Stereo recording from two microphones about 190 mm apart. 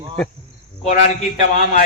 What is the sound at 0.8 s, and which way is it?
Speech, 40° left (ahead or behind).